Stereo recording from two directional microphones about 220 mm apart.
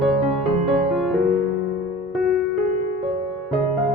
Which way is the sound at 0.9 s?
Centre (ahead or behind).